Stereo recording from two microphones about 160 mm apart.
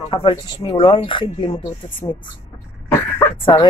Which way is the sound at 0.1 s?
35° left (ahead or behind).